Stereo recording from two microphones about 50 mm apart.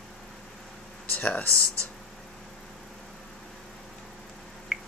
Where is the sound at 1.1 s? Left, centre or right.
Left.